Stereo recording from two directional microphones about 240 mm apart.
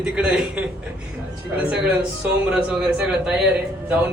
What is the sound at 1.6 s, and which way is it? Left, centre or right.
A man's voice, centre.